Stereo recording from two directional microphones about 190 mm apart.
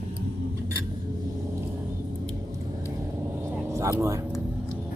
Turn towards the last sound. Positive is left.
turn(degrees=-15)  # may be behind; listen again after turning